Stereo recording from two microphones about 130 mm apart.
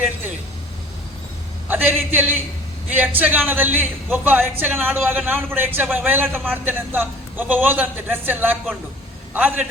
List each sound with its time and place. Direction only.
1.6 s a man's voice: 15° right (ahead or behind)